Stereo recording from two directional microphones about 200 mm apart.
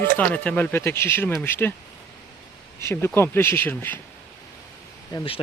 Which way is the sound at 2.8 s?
10° left (ahead or behind).